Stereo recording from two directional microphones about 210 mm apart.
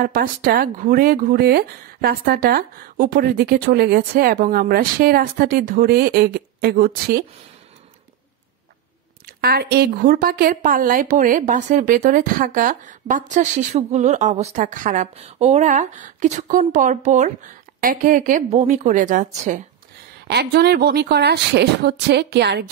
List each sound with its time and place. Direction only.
0.0 s speech: 45° right (ahead or behind)
9.4 s a woman's voice: 50° right (ahead or behind)
20.2 s speech: 50° right (ahead or behind)